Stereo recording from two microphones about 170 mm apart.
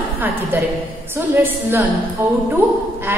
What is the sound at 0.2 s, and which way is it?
A woman's voice, 10° right (ahead or behind).